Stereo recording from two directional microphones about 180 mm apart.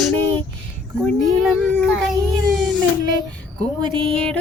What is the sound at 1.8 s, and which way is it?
Speech, 5° left (ahead or behind).